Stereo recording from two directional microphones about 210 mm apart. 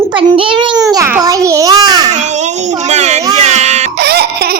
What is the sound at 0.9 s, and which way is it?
Babbling, 15° right (ahead or behind).